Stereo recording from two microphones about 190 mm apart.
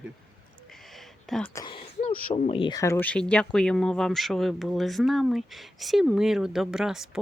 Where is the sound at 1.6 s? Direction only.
30° left (ahead or behind).